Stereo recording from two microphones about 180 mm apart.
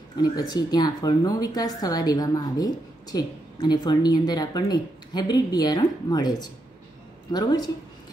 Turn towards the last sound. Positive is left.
turn(degrees=25)  # may be behind; listen again after turning